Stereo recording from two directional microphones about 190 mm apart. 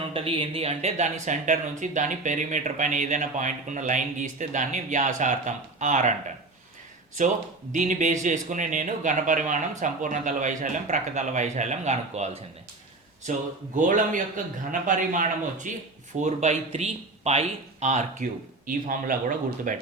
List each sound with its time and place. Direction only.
0.1 s speech: 30° right (ahead or behind)
7.7 s speech: 40° right (ahead or behind)
13.7 s speech: 45° right (ahead or behind)